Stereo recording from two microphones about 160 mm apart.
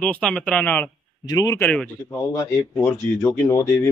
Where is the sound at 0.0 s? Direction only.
5° left (ahead or behind).